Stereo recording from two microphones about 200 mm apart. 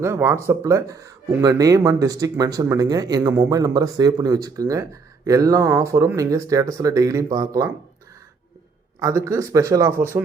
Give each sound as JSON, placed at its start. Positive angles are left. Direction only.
{"t": 0.0, "sound": "speech", "side_deg": -10}
{"t": 9.0, "sound": "speech", "side_deg": -15}